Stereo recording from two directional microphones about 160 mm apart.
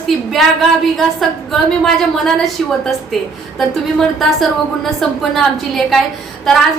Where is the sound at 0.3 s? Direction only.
Centre (ahead or behind).